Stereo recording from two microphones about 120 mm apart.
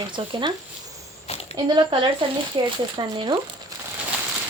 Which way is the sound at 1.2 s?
55° left (ahead or behind).